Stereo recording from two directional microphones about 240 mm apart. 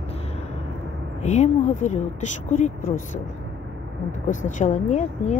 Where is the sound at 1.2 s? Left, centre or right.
Left.